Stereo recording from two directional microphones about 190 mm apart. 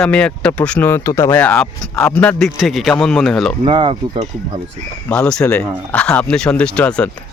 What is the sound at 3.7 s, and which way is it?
Speech, 25° right (ahead or behind).